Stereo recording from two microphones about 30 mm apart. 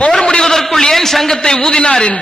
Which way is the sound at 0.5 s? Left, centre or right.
Centre.